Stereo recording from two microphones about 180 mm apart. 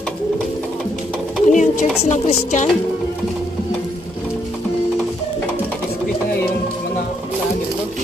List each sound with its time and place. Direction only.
1.4 s pigeon: 45° left (ahead or behind)
2.0 s chopping: 40° left (ahead or behind)